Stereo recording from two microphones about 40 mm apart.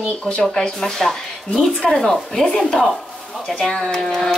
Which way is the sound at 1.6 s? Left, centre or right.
Left.